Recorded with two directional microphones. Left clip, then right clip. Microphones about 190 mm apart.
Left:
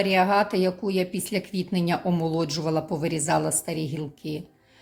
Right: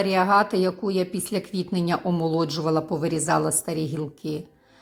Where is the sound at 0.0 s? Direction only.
Centre (ahead or behind).